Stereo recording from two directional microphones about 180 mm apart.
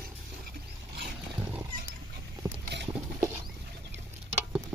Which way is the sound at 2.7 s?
70° right (ahead or behind).